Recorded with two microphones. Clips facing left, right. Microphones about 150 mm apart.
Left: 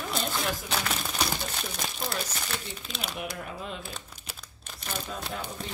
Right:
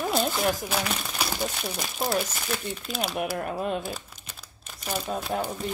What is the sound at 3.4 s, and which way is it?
Speech, 55° right (ahead or behind).